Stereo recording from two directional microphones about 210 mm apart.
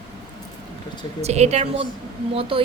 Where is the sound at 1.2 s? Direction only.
30° right (ahead or behind).